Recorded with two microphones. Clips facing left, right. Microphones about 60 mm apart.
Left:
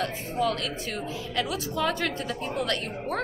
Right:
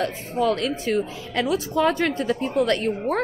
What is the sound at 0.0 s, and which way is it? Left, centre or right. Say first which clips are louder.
A woman's voice: right 4 dB; right.